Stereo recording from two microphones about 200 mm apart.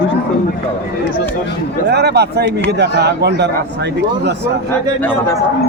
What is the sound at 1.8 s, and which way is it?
A man's voice, 55° right (ahead or behind).